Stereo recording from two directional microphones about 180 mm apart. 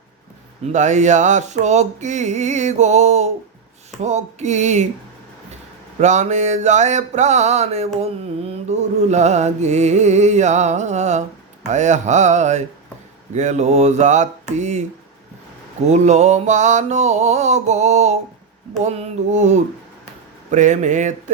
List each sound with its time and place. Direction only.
0.7 s mantra: 40° right (ahead or behind)
6.0 s mantra: 40° right (ahead or behind)
15.9 s mantra: 40° right (ahead or behind)